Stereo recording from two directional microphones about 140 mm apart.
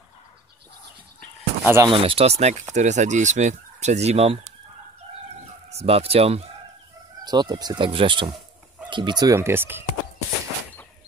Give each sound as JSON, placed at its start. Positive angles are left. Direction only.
{"t": 1.6, "sound": "speech", "side_deg": -15}
{"t": 1.9, "sound": "speech", "side_deg": -40}
{"t": 5.7, "sound": "speech", "side_deg": -45}
{"t": 7.2, "sound": "speech", "side_deg": -30}